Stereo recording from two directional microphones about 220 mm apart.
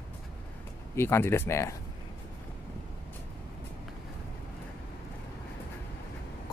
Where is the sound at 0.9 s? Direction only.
10° left (ahead or behind).